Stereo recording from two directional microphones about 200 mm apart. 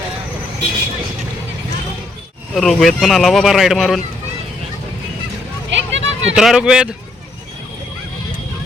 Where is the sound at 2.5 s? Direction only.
Centre (ahead or behind).